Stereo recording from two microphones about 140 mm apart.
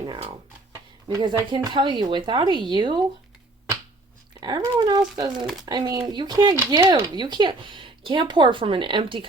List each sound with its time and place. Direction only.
1.0 s speech: 35° right (ahead or behind)
4.4 s speech: 30° right (ahead or behind)